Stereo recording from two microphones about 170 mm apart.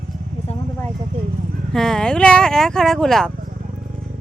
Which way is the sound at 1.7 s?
5° left (ahead or behind).